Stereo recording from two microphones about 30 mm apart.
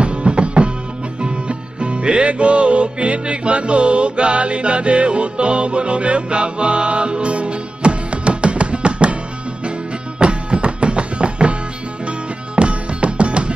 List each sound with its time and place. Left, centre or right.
0.0 s music: right
10.1 s music: right
12.5 s music: right